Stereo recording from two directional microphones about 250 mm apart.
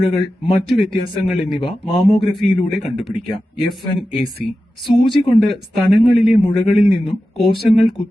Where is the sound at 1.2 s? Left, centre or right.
Centre.